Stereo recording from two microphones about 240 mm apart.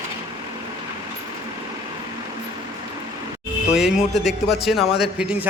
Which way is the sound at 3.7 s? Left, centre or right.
Centre.